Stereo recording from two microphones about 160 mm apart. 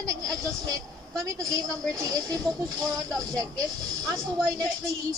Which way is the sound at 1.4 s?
20° right (ahead or behind).